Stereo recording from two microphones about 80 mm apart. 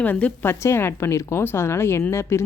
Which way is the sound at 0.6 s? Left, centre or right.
Left.